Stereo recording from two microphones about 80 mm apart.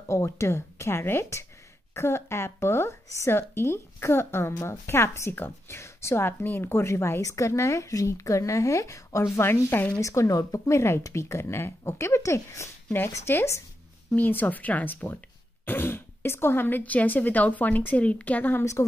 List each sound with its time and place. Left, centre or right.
0.1 s speech: left
9.4 s speech: left
9.9 s speech: left